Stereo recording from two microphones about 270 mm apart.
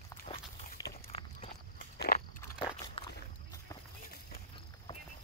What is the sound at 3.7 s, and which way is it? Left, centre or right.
Run, centre.